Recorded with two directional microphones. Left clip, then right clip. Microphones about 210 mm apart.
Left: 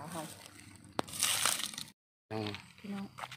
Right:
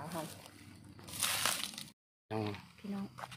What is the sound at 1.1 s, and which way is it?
Crushing, 20° left (ahead or behind).